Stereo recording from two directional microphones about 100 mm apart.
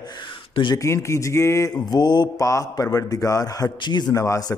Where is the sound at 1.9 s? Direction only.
45° left (ahead or behind).